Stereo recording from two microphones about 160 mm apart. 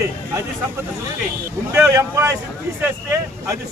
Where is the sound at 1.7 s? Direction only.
20° right (ahead or behind).